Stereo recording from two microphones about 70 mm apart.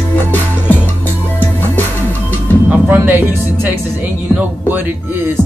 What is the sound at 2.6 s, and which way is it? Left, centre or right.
Music, right.